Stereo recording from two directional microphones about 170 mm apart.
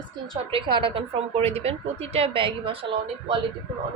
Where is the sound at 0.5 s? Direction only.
30° right (ahead or behind).